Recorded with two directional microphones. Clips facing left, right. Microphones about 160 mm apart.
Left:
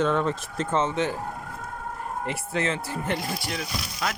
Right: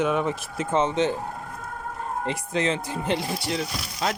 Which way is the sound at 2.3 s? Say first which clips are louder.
Right 2 dB; 20° right (ahead or behind).